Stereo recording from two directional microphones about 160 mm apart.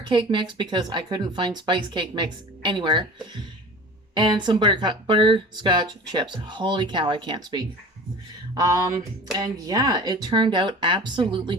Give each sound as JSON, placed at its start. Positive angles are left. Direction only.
{"t": 0.1, "sound": "speech", "side_deg": -30}
{"t": 4.1, "sound": "speech", "side_deg": -30}